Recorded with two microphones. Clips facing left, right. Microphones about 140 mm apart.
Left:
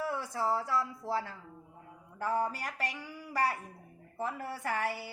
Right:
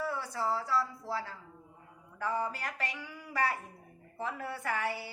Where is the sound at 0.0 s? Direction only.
15° left (ahead or behind).